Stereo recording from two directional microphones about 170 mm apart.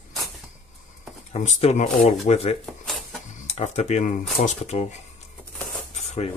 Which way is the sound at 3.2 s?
45° left (ahead or behind).